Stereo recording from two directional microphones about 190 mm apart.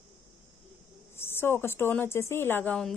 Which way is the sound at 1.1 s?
10° left (ahead or behind).